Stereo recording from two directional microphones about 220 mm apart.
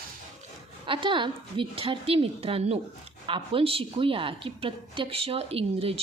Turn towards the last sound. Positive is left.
turn(degrees=-25)  # may be behind; listen again after turning